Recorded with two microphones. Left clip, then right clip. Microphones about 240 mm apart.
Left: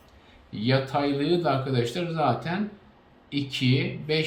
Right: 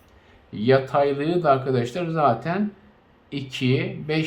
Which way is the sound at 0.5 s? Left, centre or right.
Centre.